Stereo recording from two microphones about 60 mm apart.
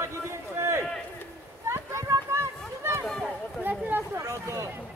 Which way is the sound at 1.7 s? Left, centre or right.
Right.